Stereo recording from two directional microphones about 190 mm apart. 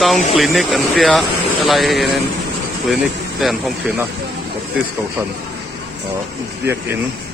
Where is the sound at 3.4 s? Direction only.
5° right (ahead or behind).